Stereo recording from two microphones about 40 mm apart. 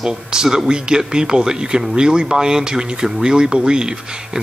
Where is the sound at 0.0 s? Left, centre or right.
Centre.